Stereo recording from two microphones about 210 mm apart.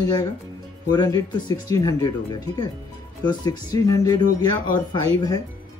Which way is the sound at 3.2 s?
20° left (ahead or behind).